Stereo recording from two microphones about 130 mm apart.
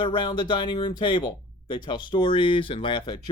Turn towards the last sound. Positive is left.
turn(degrees=35)  # may be behind; listen again after turning